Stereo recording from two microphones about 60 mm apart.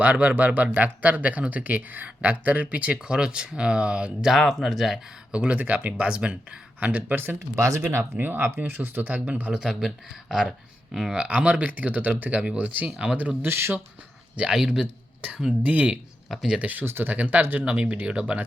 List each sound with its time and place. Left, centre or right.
0.0 s speech: right
4.3 s speech: centre
5.3 s speech: right
7.5 s speech: right
7.8 s speech: right
9.5 s speech: centre
11.1 s speech: right
13.4 s speech: right
14.3 s speech: centre
15.6 s speech: right